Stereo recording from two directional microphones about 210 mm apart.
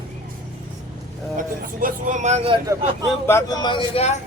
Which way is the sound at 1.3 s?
40° right (ahead or behind).